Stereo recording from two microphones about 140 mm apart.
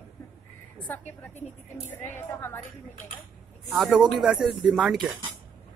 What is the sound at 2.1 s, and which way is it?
Speech, 15° left (ahead or behind).